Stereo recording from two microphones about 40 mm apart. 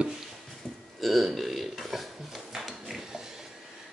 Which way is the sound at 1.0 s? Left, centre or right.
Centre.